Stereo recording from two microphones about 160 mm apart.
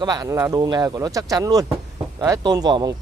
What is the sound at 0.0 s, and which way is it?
Speech, 25° right (ahead or behind).